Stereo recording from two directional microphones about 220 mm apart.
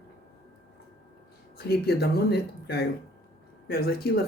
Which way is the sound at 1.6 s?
45° left (ahead or behind).